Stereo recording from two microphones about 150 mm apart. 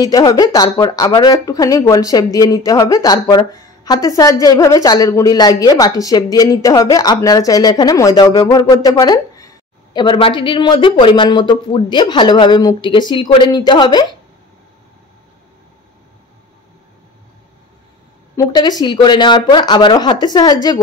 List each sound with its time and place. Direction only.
0.0 s speech: 25° left (ahead or behind)
18.3 s speech: 25° left (ahead or behind)